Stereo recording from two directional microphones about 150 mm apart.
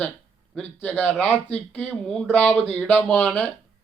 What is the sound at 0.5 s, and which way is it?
A man's voice, 10° left (ahead or behind).